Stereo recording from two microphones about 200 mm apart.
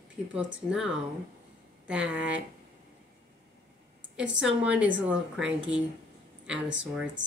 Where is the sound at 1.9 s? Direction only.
5° right (ahead or behind).